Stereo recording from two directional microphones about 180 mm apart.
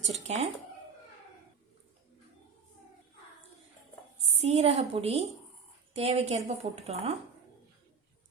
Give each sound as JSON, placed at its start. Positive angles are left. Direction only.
{"t": 0.1, "sound": "a woman's voice", "side_deg": -40}
{"t": 4.3, "sound": "a woman's voice", "side_deg": -35}